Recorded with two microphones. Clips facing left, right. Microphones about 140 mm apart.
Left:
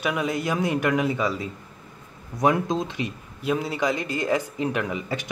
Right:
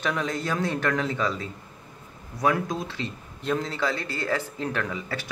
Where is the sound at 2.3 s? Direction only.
20° left (ahead or behind).